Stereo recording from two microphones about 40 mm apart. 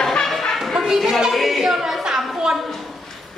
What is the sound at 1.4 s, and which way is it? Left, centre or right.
Music, centre.